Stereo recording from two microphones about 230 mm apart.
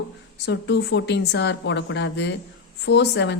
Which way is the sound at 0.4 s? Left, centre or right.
Left.